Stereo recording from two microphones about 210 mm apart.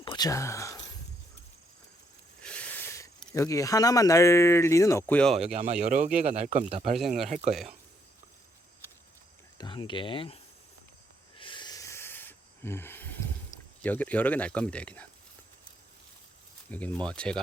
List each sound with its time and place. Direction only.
0.0 s speech: 20° left (ahead or behind)
2.4 s a sound: 5° left (ahead or behind)
3.3 s speech: 15° left (ahead or behind)
5.5 s speech: 35° right (ahead or behind)
7.5 s speech: centre (ahead or behind)
9.6 s speech: 20° left (ahead or behind)
11.3 s a sound: 25° left (ahead or behind)
13.8 s speech: 5° left (ahead or behind)
16.6 s speech: 5° left (ahead or behind)